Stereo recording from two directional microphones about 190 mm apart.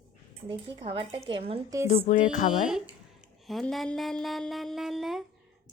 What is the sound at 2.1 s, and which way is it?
Speech, 40° left (ahead or behind).